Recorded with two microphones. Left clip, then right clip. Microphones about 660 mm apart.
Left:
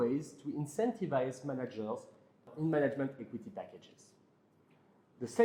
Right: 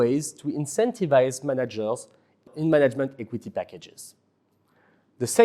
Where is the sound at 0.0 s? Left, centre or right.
Right.